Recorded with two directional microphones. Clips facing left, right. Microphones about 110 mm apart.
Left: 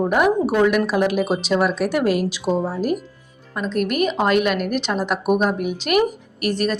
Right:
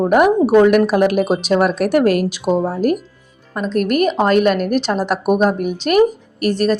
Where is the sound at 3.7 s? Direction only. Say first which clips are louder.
Right 5 dB; 45° right (ahead or behind).